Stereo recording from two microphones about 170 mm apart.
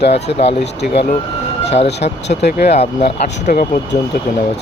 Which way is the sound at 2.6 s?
40° left (ahead or behind).